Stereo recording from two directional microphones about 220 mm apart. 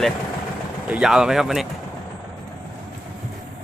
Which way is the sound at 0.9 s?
5° right (ahead or behind).